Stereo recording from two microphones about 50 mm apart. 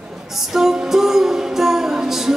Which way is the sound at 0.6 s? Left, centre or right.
Centre.